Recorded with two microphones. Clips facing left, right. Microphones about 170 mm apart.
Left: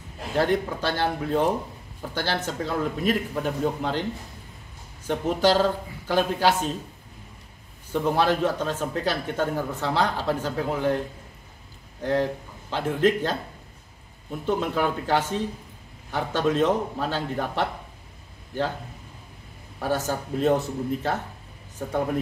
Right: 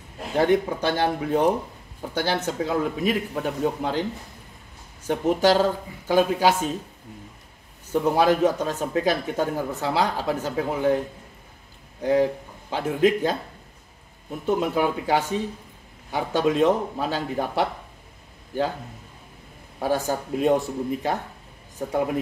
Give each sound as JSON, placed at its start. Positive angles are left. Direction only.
{"t": 0.4, "sound": "speech", "side_deg": -15}
{"t": 5.0, "sound": "speech", "side_deg": -10}
{"t": 7.9, "sound": "speech", "side_deg": -15}
{"t": 12.0, "sound": "speech", "side_deg": -10}
{"t": 14.4, "sound": "speech", "side_deg": -10}
{"t": 19.8, "sound": "speech", "side_deg": -15}